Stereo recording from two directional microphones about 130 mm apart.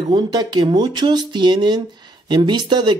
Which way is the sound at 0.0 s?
35° right (ahead or behind).